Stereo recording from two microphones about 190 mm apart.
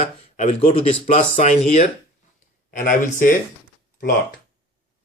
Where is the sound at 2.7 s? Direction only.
45° left (ahead or behind).